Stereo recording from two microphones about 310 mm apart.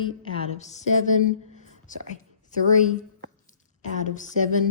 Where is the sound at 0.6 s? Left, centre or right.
Left.